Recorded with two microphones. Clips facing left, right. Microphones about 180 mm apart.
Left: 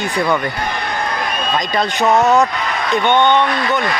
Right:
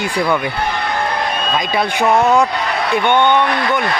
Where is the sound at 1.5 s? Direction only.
10° right (ahead or behind).